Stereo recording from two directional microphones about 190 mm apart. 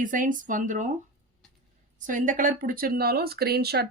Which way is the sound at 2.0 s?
45° right (ahead or behind).